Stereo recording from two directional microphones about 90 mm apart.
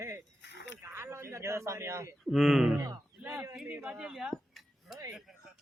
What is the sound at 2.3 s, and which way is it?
Speech, centre (ahead or behind).